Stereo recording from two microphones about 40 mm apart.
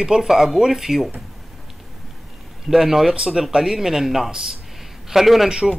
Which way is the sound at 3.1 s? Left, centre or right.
Centre.